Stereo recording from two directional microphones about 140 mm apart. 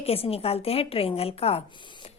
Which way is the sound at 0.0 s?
45° left (ahead or behind).